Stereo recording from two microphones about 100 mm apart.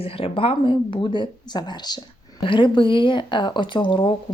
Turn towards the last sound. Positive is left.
turn(degrees=55)  # may be behind; listen again after turning